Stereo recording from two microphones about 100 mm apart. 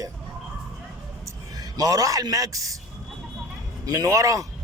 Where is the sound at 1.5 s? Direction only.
40° right (ahead or behind).